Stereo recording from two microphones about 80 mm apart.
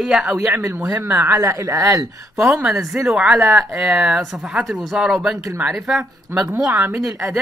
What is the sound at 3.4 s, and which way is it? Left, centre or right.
Speech, right.